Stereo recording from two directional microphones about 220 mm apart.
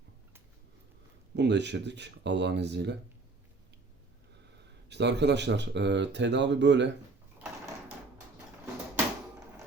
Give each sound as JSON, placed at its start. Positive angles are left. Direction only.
{"t": 1.4, "sound": "speech", "side_deg": -50}
{"t": 4.9, "sound": "speech", "side_deg": -50}